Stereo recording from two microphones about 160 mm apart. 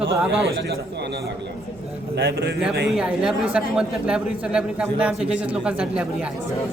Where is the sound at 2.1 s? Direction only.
90° right.